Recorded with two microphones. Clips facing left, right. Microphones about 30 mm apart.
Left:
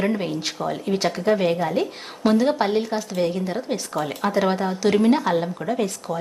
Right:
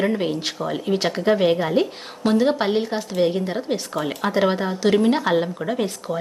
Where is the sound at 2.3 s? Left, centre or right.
Centre.